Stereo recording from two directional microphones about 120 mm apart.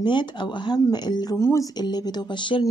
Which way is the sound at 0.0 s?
40° left (ahead or behind).